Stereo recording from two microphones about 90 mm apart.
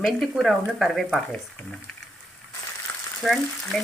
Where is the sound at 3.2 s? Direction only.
Centre (ahead or behind).